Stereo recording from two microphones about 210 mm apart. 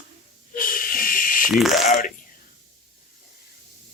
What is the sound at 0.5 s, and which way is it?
Snake, 40° left (ahead or behind).